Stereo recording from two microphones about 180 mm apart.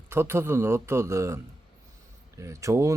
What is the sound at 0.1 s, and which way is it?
A man's voice, 15° right (ahead or behind).